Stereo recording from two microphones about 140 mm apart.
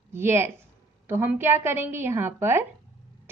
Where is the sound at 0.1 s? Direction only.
15° right (ahead or behind).